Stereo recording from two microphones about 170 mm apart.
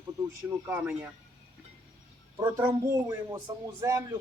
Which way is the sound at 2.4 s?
20° right (ahead or behind).